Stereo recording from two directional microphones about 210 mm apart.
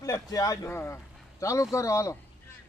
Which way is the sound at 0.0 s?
15° left (ahead or behind).